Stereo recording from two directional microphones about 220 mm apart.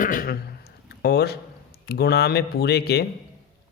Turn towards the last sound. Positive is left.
turn(degrees=45)  # may be behind; listen again after turning